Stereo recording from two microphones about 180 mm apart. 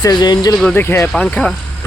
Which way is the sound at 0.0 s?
25° left (ahead or behind).